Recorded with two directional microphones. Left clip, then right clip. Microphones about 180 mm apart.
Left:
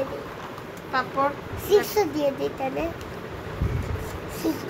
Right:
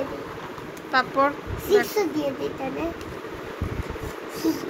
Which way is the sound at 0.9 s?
25° right (ahead or behind).